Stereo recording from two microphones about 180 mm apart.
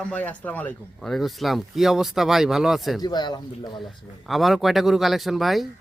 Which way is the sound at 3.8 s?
Centre (ahead or behind).